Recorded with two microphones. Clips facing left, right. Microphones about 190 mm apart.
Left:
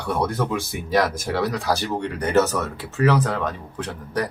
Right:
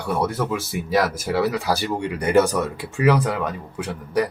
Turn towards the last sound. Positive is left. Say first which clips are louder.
# right 3 dB
turn(degrees=-10)  # may be behind; listen again after turning